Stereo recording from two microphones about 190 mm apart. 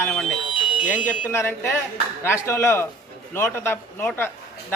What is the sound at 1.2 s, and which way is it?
A man's voice, 10° left (ahead or behind).